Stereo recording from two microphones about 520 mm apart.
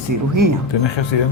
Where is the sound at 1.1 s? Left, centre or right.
Left.